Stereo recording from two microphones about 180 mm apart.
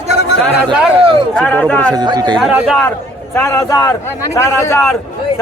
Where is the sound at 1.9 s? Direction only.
25° right (ahead or behind).